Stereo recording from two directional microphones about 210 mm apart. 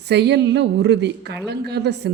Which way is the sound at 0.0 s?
55° right (ahead or behind).